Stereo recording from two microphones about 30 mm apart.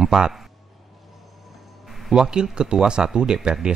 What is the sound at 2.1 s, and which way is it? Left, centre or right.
Speech, right.